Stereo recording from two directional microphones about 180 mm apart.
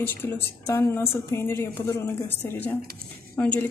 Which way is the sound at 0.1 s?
10° left (ahead or behind).